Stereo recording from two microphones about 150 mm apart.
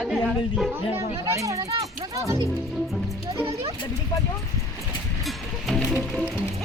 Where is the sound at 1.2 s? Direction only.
20° right (ahead or behind).